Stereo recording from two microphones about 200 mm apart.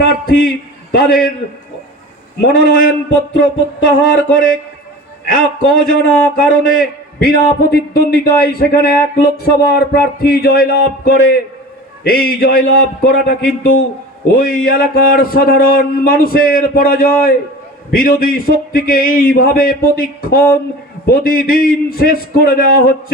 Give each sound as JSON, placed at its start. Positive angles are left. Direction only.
{"t": 0.0, "sound": "a man's voice", "side_deg": 45}
{"t": 2.4, "sound": "a man's voice", "side_deg": 45}